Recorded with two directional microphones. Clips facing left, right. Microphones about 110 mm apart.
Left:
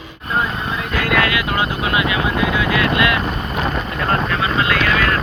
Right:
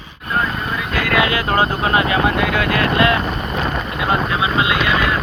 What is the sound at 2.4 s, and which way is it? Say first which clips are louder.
Speech: even; 60° right (ahead or behind).